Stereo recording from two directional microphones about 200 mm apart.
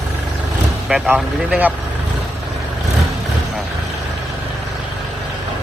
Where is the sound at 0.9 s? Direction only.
5° right (ahead or behind).